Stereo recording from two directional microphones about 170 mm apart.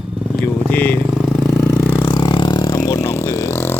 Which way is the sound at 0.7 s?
10° left (ahead or behind).